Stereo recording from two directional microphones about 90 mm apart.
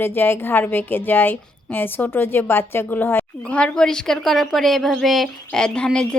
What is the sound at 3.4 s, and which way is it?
A woman's voice, 15° left (ahead or behind).